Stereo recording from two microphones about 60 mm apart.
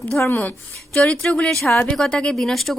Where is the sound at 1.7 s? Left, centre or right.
Left; by 2.8 s centre.